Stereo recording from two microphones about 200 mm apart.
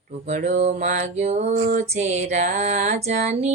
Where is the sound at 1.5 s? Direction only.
45° right (ahead or behind).